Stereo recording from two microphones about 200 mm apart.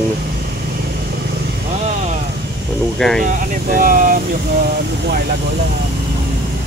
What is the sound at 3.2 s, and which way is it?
Speech, 45° right (ahead or behind).